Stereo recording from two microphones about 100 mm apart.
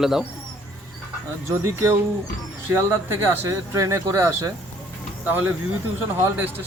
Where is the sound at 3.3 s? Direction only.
25° right (ahead or behind).